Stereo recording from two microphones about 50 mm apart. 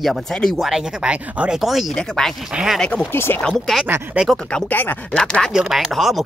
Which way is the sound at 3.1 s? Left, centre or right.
Left.